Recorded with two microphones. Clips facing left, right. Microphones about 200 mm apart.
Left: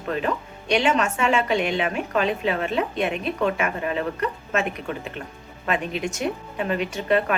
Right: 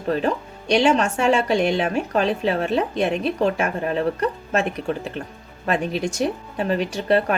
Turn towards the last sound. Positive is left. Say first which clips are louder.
# right 2 dB
turn(degrees=-35)  # may be behind; listen again after turning